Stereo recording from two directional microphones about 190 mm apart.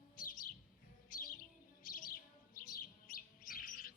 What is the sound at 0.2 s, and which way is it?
Chirp, 45° left (ahead or behind).